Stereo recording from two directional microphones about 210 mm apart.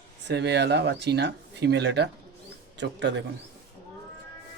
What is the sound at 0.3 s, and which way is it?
A man's voice, 55° right (ahead or behind).